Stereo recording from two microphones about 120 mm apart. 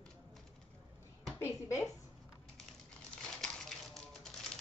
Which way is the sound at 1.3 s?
20° left (ahead or behind).